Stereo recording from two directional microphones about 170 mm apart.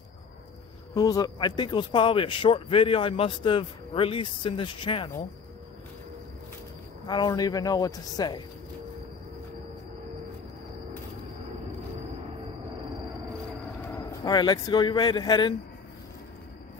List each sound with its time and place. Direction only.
0.9 s speech: 20° left (ahead or behind)
7.1 s speech: 25° left (ahead or behind)
13.7 s a sound: 15° left (ahead or behind)
14.3 s speech: 25° left (ahead or behind)